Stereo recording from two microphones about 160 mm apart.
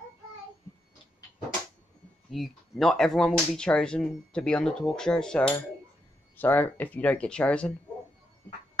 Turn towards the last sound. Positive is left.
turn(degrees=5)  # may be behind; listen again after turning